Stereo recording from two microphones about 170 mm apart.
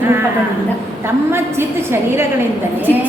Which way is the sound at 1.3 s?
15° right (ahead or behind).